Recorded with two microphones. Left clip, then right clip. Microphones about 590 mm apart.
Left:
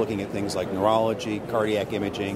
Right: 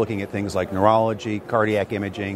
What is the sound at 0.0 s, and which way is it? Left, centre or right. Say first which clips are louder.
Speech: right 2 dB; right.